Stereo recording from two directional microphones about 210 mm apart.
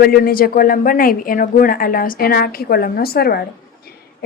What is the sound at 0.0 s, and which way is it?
A woman's voice, 45° left (ahead or behind).